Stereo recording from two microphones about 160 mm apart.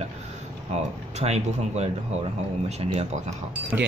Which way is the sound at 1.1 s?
45° right (ahead or behind).